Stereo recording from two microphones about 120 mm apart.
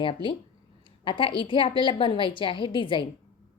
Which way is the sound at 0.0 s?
45° left (ahead or behind).